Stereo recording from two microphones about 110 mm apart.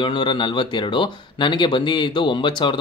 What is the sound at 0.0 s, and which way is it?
Speech, 45° left (ahead or behind).